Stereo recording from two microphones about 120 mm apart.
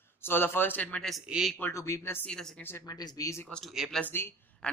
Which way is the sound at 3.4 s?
5° left (ahead or behind).